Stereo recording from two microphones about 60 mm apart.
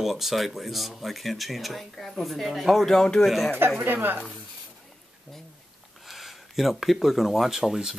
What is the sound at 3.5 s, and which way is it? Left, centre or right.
Speech, right.